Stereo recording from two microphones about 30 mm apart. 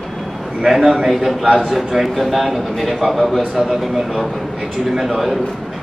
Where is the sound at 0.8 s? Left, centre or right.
Centre.